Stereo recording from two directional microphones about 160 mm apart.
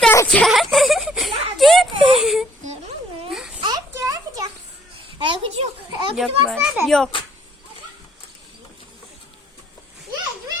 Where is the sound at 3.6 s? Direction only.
20° right (ahead or behind).